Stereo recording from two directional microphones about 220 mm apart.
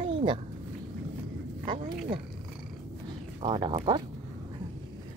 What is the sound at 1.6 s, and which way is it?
Speech, 20° right (ahead or behind).